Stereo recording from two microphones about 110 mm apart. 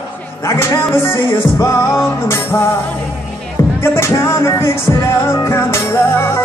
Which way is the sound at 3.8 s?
25° left (ahead or behind).